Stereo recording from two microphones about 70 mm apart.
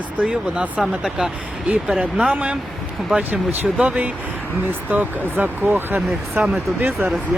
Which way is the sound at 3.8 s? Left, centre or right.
Centre.